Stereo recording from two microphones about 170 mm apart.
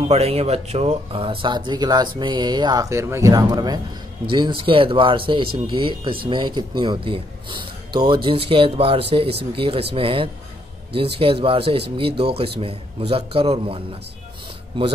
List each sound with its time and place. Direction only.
0.1 s speech: 35° right (ahead or behind)